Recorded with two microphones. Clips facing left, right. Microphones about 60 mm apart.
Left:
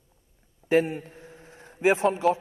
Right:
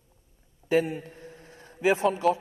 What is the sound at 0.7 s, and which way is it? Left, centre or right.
Speech, left.